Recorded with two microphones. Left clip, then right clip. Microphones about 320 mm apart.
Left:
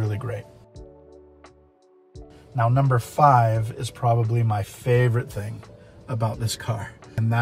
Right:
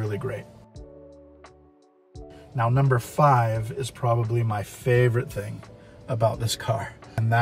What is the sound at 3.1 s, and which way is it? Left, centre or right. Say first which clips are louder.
Speech: left 4 dB; left.